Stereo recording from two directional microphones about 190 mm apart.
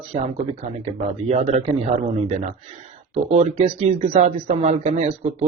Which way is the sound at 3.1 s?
35° right (ahead or behind).